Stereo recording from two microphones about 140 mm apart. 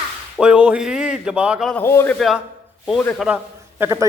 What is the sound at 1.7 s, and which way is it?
Speech, 15° left (ahead or behind).